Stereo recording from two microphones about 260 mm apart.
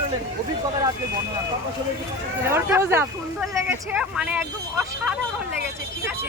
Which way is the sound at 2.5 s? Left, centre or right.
Centre.